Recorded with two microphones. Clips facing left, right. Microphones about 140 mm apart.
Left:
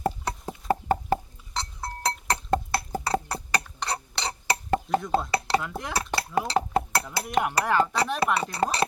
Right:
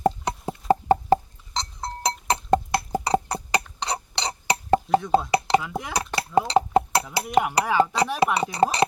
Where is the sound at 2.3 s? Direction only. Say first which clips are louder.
Right 5 dB; 15° right (ahead or behind).